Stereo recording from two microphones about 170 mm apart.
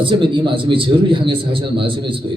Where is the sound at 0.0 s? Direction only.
30° right (ahead or behind).